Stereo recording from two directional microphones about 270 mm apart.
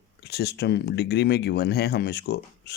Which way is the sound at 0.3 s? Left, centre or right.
Left.